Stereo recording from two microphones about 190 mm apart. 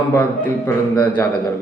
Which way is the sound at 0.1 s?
15° left (ahead or behind).